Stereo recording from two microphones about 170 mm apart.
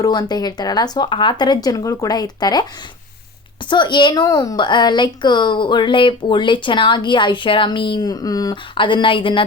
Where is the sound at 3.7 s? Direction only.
25° left (ahead or behind).